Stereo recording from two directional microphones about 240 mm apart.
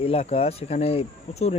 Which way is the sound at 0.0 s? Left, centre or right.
Left.